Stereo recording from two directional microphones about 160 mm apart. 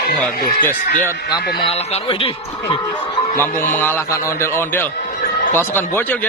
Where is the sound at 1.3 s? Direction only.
35° left (ahead or behind).